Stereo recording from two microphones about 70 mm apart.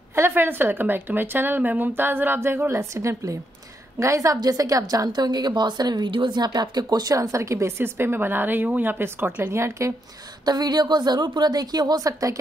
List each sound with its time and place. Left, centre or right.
0.1 s a woman's voice: right
4.4 s a woman's voice: right
7.2 s a woman's voice: right
10.4 s a woman's voice: right